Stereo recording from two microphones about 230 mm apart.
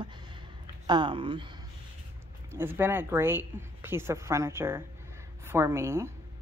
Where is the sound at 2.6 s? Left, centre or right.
Centre.